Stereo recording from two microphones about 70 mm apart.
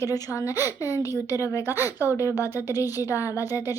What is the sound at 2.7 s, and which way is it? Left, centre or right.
Speech, left.